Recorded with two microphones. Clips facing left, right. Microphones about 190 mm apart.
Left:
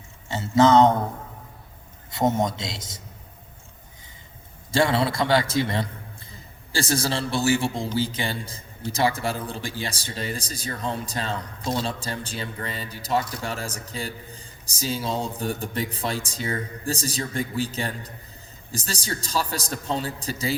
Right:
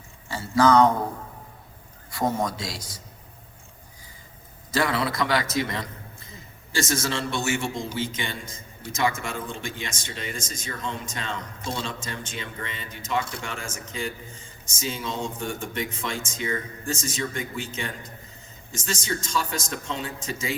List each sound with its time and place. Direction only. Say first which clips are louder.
0.3 s speech: left 2 dB; 25° left (ahead or behind)
2.0 s a man's voice: left 3 dB; 25° left (ahead or behind)
4.7 s a man's voice: left 3 dB; 30° left (ahead or behind)